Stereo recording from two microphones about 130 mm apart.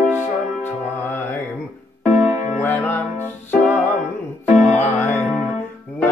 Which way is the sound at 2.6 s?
15° left (ahead or behind).